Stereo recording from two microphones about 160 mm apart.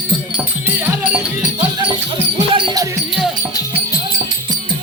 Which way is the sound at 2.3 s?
30° right (ahead or behind).